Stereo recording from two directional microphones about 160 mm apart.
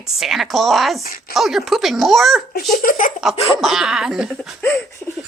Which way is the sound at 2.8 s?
60° left (ahead or behind).